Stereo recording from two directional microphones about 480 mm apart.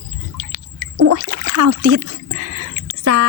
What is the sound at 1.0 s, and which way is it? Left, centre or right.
Speech, right.